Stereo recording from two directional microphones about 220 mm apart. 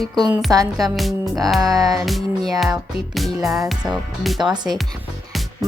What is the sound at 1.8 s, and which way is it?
Music, 15° right (ahead or behind).